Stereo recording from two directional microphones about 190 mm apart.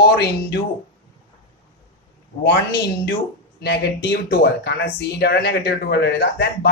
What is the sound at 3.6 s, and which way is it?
Speech, 60° left (ahead or behind).